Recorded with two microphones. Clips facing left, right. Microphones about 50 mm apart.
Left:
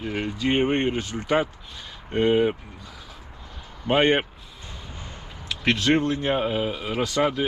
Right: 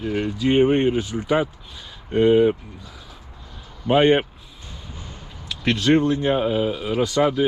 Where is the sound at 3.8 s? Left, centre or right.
Centre.